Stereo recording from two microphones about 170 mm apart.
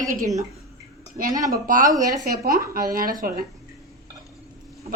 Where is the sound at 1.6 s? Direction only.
55° right (ahead or behind).